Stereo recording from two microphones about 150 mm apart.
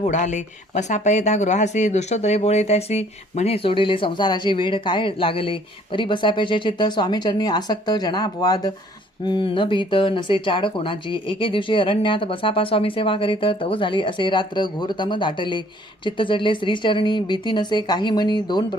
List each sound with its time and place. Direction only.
0.0 s speech: 50° left (ahead or behind); by 18.3 s 30° left (ahead or behind)